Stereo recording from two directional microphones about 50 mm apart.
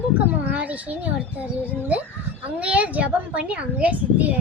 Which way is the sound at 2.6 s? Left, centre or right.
Right.